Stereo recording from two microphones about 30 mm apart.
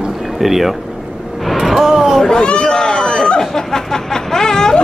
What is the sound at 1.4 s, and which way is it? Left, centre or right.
Vehicle, centre.